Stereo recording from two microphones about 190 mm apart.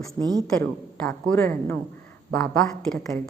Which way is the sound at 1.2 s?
10° left (ahead or behind).